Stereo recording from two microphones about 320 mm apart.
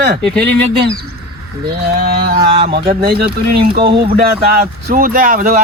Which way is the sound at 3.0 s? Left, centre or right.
Right.